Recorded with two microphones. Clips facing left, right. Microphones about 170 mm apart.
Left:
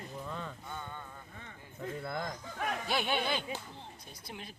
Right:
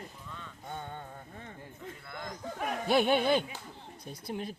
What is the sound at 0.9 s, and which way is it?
Speech, 50° right (ahead or behind).